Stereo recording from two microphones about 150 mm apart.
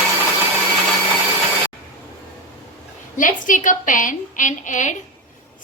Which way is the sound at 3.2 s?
60° left (ahead or behind).